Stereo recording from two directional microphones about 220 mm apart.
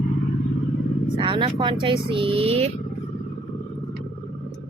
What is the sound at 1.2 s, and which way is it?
Speech, 20° right (ahead or behind).